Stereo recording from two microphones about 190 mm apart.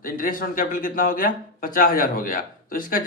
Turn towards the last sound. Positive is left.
turn(degrees=45)  # may be behind; listen again after turning